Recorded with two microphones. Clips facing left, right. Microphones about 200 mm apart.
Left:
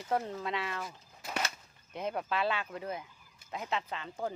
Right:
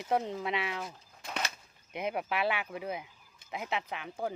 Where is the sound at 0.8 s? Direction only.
5° left (ahead or behind).